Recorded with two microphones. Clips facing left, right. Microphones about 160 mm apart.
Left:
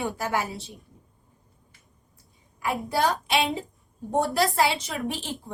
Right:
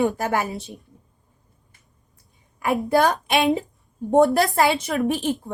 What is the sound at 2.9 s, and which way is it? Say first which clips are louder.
Speech: right 6 dB; 60° right (ahead or behind).